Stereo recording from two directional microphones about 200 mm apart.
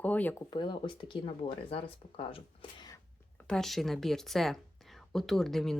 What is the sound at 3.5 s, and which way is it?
Speech, centre (ahead or behind).